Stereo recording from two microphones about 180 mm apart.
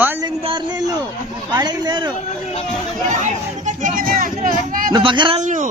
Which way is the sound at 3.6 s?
45° right (ahead or behind).